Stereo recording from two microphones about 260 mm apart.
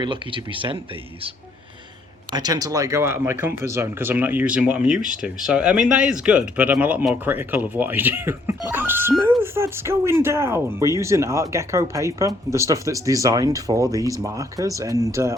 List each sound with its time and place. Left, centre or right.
0.0 s speech: centre
2.3 s speech: centre